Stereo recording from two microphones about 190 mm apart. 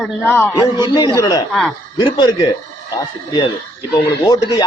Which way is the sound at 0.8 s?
25° left (ahead or behind).